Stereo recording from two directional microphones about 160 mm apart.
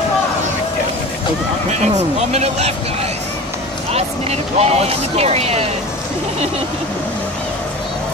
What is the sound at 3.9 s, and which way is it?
Speech, 40° right (ahead or behind).